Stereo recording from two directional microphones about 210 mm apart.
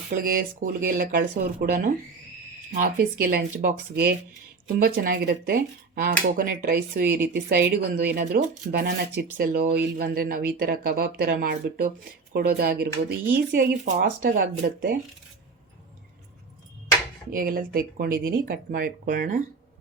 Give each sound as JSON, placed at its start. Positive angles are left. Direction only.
{"t": 0.1, "sound": "speech", "side_deg": -40}
{"t": 17.3, "sound": "speech", "side_deg": -45}